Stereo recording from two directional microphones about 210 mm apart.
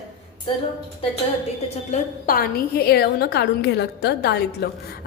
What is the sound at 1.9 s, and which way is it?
A woman's voice, 45° left (ahead or behind).